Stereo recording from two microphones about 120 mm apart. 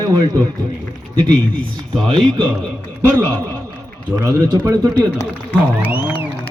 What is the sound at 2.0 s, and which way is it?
Speech, 45° right (ahead or behind).